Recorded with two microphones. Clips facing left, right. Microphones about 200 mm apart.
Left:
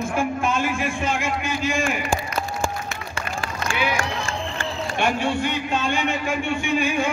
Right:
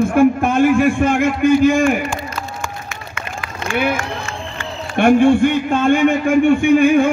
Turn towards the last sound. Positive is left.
turn(degrees=-55)  # may be behind; listen again after turning